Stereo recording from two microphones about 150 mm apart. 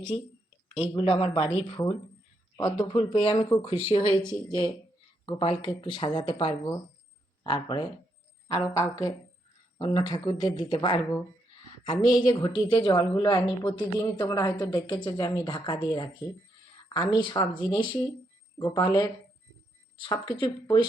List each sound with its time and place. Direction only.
0.7 s speech: 40° left (ahead or behind)
1.7 s a woman's voice: 30° left (ahead or behind)
8.4 s a woman's voice: 20° left (ahead or behind); by 20.8 s 35° left (ahead or behind)